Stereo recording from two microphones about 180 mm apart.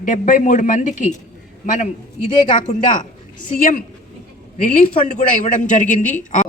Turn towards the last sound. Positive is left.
turn(degrees=45)  # may be behind; listen again after turning